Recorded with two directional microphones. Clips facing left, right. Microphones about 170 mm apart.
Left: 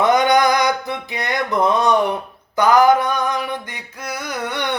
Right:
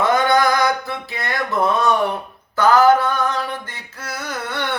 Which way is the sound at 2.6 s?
15° left (ahead or behind).